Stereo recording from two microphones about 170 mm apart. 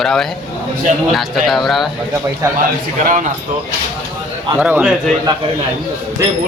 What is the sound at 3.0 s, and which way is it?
Speech, 50° right (ahead or behind).